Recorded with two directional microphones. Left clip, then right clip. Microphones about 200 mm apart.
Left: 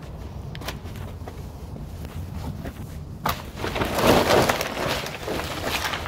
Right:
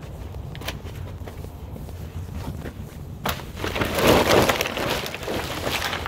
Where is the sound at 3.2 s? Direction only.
50° right (ahead or behind).